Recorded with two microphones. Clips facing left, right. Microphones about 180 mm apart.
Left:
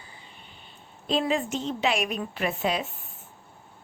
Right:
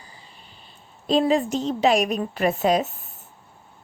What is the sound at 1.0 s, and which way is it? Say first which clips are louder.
A woman's voice: right 6 dB; 40° right (ahead or behind).